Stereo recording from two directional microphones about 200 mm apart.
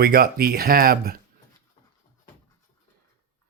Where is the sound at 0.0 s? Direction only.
50° right (ahead or behind).